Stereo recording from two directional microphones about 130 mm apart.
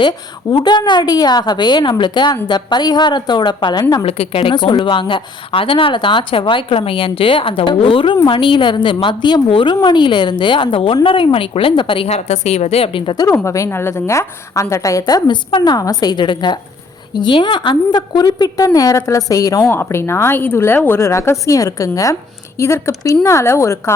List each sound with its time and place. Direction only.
0.5 s a woman's voice: 35° left (ahead or behind)
4.0 s a woman's voice: 50° left (ahead or behind)
4.5 s a woman's voice: 35° left (ahead or behind)
13.3 s a woman's voice: 25° left (ahead or behind)
19.6 s a woman's voice: 15° left (ahead or behind)